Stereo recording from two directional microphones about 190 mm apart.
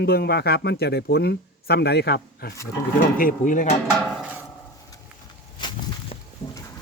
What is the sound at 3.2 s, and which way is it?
Speech, 45° left (ahead or behind).